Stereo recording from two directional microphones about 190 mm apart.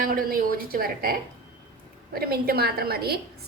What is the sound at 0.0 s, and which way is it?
A woman's voice, 50° right (ahead or behind).